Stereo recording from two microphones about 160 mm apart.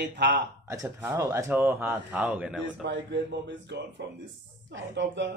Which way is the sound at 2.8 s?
90° right.